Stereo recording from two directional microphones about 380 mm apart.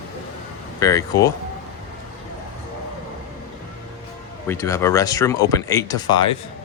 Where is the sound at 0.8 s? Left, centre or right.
Centre.